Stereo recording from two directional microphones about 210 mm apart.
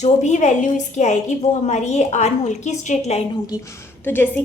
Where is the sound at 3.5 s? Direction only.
15° left (ahead or behind).